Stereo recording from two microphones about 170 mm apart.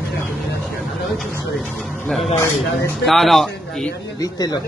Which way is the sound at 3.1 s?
Centre (ahead or behind).